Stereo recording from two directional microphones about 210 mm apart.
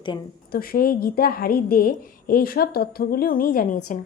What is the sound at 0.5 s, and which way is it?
A woman's voice, 45° left (ahead or behind).